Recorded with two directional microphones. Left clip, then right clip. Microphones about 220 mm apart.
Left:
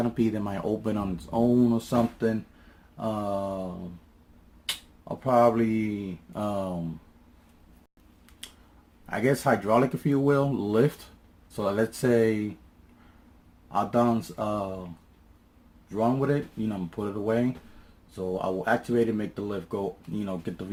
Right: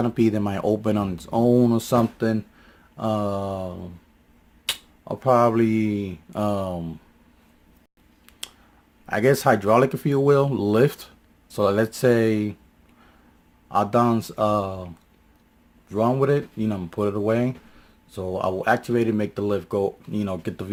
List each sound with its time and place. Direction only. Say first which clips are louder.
0.1 s speech: right 6 dB; 40° right (ahead or behind)
4.6 s speech: right 5 dB; 45° right (ahead or behind)
9.0 s speech: right 6 dB; 40° right (ahead or behind)
13.7 s speech: right 5 dB; 45° right (ahead or behind)
16.0 s speech: right 5 dB; 45° right (ahead or behind)